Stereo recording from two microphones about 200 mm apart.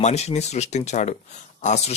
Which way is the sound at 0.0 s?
35° left (ahead or behind).